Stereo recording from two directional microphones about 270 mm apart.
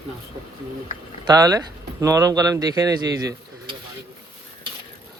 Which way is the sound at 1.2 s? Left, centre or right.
Centre.